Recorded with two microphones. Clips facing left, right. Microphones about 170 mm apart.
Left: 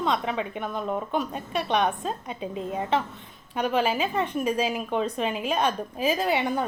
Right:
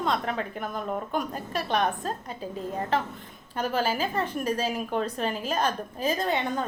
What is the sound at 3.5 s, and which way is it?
A woman's voice, centre (ahead or behind).